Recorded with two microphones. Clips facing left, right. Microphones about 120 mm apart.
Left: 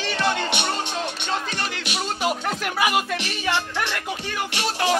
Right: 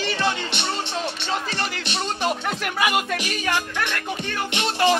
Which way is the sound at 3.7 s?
15° left (ahead or behind).